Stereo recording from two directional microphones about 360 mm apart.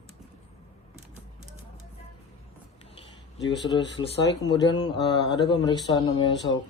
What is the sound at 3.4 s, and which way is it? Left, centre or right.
Speech, centre.